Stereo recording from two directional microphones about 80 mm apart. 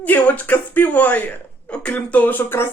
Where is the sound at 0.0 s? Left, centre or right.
Centre.